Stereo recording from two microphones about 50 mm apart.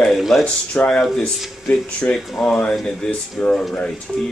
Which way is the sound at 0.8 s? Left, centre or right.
Left.